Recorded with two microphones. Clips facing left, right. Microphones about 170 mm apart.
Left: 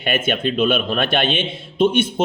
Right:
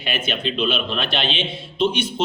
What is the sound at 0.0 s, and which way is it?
A man's voice, 50° left (ahead or behind).